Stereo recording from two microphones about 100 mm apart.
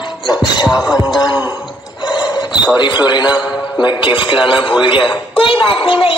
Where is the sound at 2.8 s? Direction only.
50° left (ahead or behind).